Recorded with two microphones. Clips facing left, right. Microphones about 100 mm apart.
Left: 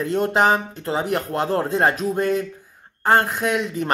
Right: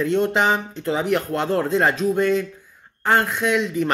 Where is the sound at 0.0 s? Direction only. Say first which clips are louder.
Even; 40° left (ahead or behind).